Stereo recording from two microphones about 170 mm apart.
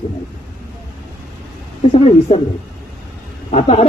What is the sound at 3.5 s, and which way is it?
Speech, 35° left (ahead or behind).